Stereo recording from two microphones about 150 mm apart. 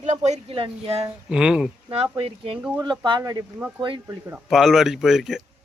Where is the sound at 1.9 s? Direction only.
40° right (ahead or behind); by 4.4 s 20° right (ahead or behind).